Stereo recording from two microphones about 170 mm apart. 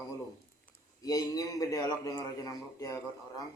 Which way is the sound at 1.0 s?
20° left (ahead or behind).